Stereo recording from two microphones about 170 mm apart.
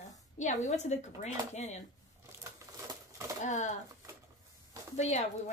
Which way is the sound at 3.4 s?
45° left (ahead or behind).